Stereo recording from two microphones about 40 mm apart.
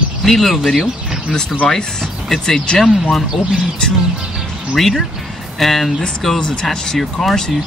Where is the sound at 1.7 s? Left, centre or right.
Centre.